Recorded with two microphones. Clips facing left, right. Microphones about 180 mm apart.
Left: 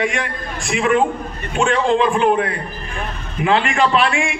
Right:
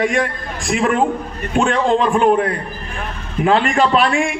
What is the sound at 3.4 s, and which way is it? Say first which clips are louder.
Speech: right 2 dB; 40° right (ahead or behind).